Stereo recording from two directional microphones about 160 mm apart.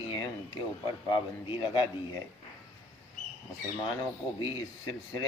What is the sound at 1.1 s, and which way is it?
Speech, 30° left (ahead or behind).